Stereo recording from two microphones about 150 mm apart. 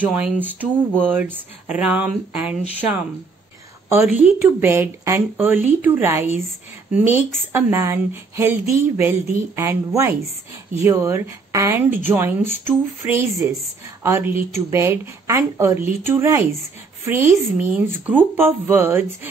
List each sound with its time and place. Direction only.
0.0 s speech: 10° right (ahead or behind)
4.0 s speech: 10° right (ahead or behind)